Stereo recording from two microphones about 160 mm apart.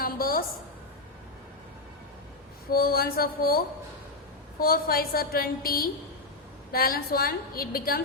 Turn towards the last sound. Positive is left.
turn(degrees=65)  # may be behind; listen again after turning